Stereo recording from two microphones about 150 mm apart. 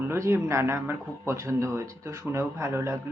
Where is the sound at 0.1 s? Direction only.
15° right (ahead or behind).